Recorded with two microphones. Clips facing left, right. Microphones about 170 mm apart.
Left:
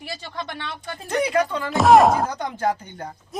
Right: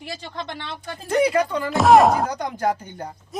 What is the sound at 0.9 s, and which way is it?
Speech, 10° right (ahead or behind).